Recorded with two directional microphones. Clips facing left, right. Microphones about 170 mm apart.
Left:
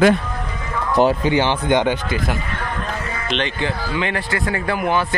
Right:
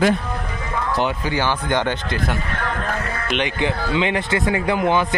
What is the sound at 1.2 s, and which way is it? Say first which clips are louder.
Speech: left 4 dB; 20° left (ahead or behind).